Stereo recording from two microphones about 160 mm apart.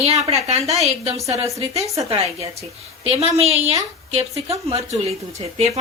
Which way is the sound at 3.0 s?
40° right (ahead or behind).